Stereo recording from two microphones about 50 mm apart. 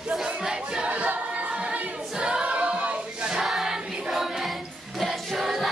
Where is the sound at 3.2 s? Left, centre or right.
Centre.